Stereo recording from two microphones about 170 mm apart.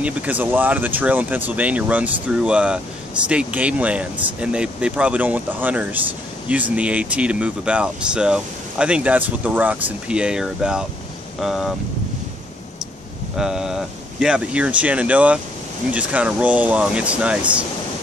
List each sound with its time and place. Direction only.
0.0 s speech: 10° right (ahead or behind)
13.4 s speech: 5° right (ahead or behind)